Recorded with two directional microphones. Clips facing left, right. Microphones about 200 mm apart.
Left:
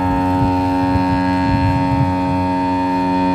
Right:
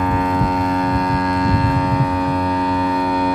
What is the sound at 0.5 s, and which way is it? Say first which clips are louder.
Ship: left 3 dB; 30° left (ahead or behind).